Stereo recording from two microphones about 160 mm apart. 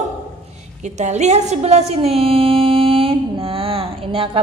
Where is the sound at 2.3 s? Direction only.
35° right (ahead or behind).